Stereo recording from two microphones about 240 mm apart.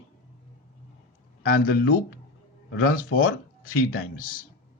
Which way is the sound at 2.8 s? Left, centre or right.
Left.